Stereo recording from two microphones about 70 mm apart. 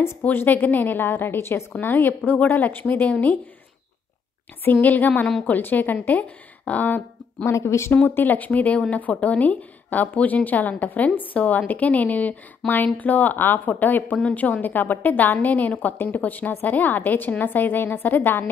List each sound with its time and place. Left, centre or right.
0.2 s a woman's voice: left
4.8 s a woman's voice: left
7.4 s speech: left
7.9 s a woman's voice: left